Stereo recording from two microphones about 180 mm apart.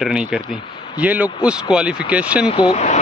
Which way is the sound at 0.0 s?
5° right (ahead or behind).